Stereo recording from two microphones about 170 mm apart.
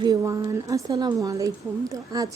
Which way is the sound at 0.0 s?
20° right (ahead or behind).